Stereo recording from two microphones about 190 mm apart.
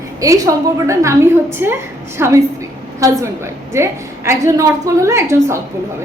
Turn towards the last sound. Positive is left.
turn(degrees=-15)  # may be behind; listen again after turning